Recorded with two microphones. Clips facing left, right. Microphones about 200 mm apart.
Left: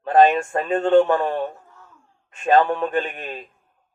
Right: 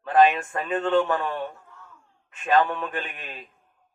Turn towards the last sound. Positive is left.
turn(degrees=35)  # may be behind; listen again after turning